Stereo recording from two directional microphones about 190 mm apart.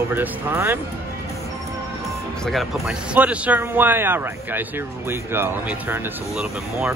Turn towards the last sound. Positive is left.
turn(degrees=-5)  # may be behind; listen again after turning